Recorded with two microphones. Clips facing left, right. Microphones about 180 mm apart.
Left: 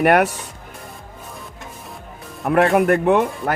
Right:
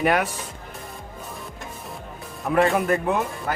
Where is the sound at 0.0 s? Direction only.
65° left (ahead or behind).